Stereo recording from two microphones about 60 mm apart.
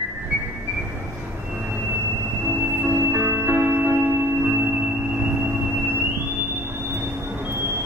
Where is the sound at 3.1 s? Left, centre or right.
Right.